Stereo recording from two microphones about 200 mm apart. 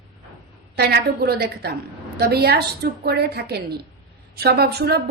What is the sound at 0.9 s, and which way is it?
A woman's voice, 50° right (ahead or behind).